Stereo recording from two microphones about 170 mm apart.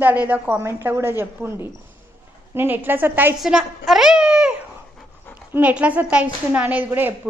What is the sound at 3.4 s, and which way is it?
Babbling, centre (ahead or behind).